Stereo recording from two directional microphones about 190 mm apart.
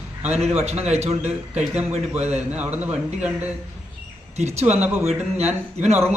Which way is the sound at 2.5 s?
10° right (ahead or behind).